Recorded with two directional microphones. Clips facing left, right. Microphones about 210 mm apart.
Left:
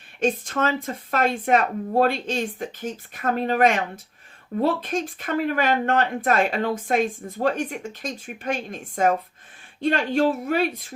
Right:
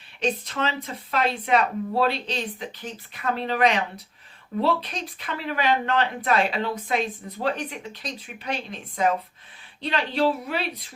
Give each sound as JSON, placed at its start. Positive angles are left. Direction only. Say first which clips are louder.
{"t": 0.2, "sound": "speech", "louder": "left 3 dB", "side_deg": 50}